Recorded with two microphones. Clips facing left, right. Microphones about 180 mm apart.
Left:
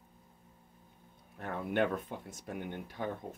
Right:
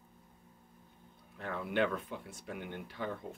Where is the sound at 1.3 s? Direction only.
50° left (ahead or behind).